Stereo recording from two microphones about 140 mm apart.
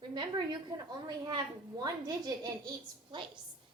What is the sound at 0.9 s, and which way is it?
A woman's voice, 30° right (ahead or behind).